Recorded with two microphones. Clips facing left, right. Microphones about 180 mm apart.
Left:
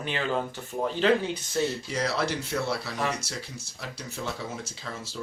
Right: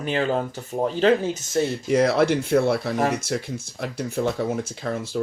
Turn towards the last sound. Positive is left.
turn(degrees=-55)  # may be behind; listen again after turning